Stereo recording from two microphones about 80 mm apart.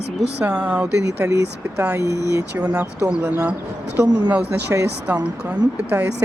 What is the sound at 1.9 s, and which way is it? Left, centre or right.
Speech, right.